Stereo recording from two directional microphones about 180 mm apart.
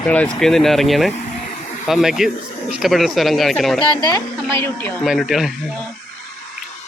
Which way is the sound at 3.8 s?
25° left (ahead or behind).